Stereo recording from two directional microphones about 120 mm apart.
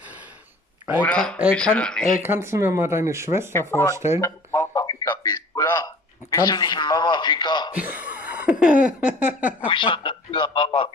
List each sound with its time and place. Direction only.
1.0 s speech: 10° left (ahead or behind)
2.2 s speech: 20° right (ahead or behind)
3.5 s speech: 20° left (ahead or behind)
3.9 s speech: 25° right (ahead or behind)
4.2 s a sound: 25° left (ahead or behind)
7.7 s a sound: 15° right (ahead or behind)
9.7 s a man's voice: 45° left (ahead or behind)